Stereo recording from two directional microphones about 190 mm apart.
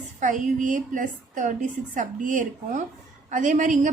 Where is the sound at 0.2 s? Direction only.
40° right (ahead or behind).